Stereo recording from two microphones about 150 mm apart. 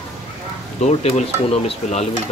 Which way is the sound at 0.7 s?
50° left (ahead or behind).